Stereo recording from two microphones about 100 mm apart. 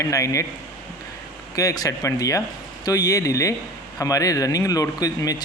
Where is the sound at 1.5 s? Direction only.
35° left (ahead or behind).